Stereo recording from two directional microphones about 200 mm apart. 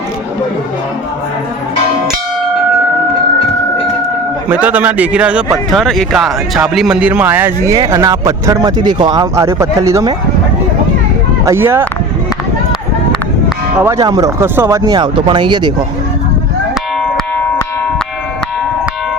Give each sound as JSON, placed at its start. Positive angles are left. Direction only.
{"t": 4.4, "sound": "speech", "side_deg": -5}
{"t": 11.4, "sound": "speech", "side_deg": -10}
{"t": 13.7, "sound": "speech", "side_deg": -15}